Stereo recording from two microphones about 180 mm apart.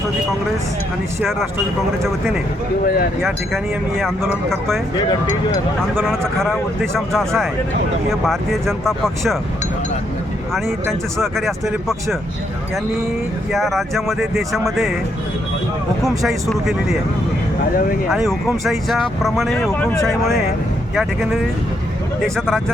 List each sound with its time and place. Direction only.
2.0 s speech: centre (ahead or behind)
2.8 s speech: 55° left (ahead or behind)
3.2 s speech: centre (ahead or behind)
5.9 s speech: 5° left (ahead or behind)
11.2 s speech: centre (ahead or behind)
13.5 s speech: centre (ahead or behind)
16.0 s speech: centre (ahead or behind)
18.3 s speech: centre (ahead or behind)